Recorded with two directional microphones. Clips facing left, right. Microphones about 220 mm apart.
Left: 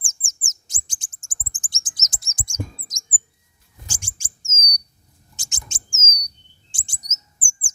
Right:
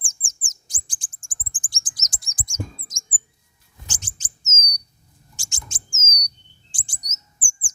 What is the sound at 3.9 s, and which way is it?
Bird, 10° left (ahead or behind).